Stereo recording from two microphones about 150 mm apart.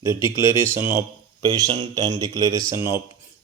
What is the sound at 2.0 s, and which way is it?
Speech, 25° right (ahead or behind).